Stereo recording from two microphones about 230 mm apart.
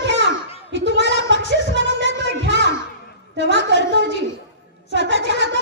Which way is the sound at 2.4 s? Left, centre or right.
Right.